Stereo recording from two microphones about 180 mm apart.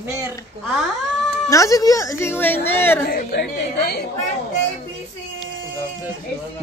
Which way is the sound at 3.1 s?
55° left (ahead or behind).